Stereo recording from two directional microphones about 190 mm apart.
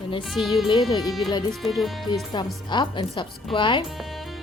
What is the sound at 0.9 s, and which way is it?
Speech, 20° left (ahead or behind).